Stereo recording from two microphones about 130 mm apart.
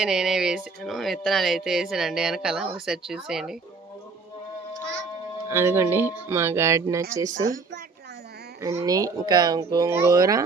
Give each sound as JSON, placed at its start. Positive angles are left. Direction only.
{"t": 0.0, "sound": "speech", "side_deg": -5}
{"t": 5.5, "sound": "speech", "side_deg": -20}
{"t": 8.6, "sound": "speech", "side_deg": -25}